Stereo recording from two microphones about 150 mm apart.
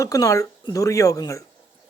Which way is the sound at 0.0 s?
20° left (ahead or behind).